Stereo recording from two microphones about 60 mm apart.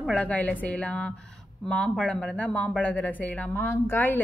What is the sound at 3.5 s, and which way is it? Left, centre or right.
Speech, left.